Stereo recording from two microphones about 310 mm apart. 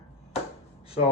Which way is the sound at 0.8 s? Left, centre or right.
Centre.